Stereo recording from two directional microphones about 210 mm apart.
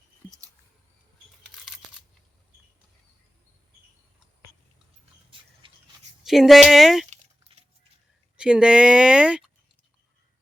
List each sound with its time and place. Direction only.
5.6 s a sound: 25° right (ahead or behind)
6.2 s speech: centre (ahead or behind)
8.4 s speech: 5° right (ahead or behind)